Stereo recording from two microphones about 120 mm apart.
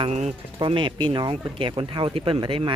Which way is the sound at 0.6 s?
45° right (ahead or behind).